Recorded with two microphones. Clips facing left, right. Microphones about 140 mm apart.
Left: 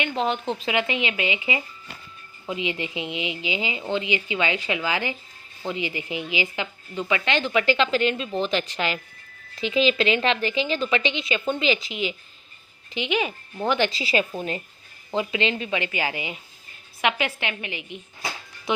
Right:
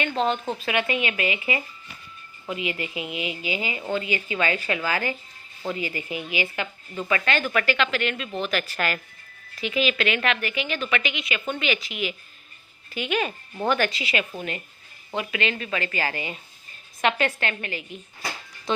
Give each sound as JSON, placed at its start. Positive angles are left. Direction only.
{"t": 0.0, "sound": "a woman's voice", "side_deg": 15}